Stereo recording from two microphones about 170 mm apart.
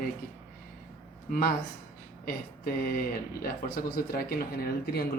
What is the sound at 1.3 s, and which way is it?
Speech, 60° left (ahead or behind).